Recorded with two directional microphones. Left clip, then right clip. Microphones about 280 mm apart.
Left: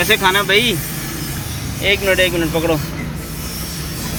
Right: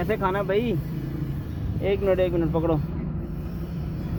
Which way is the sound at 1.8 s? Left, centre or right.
Centre.